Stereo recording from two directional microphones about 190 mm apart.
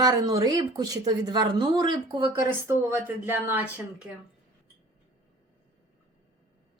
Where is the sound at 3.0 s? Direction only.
10° right (ahead or behind).